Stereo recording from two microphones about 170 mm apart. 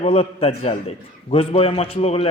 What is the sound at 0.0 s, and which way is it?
A man's voice, 35° left (ahead or behind).